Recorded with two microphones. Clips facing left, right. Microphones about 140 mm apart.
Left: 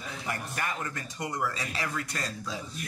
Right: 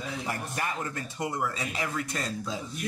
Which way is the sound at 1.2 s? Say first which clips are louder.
Right 2 dB; 5° right (ahead or behind).